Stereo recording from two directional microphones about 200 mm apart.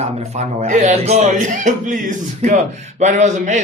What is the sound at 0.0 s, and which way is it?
A man's voice, 35° right (ahead or behind).